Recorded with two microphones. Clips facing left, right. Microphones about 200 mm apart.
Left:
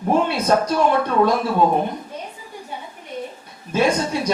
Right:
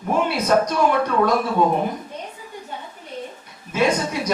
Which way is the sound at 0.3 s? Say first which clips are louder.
Even; 30° left (ahead or behind).